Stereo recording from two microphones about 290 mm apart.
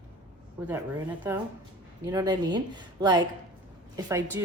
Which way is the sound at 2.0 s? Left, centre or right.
Centre.